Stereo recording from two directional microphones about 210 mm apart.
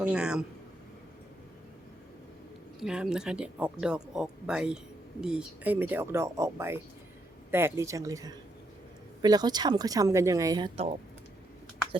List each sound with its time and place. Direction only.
0.0 s speech: 5° right (ahead or behind)
2.8 s speech: 5° right (ahead or behind); by 10.8 s 20° right (ahead or behind)